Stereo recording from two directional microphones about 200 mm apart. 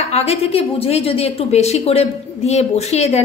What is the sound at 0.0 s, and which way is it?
A woman's voice, 30° left (ahead or behind).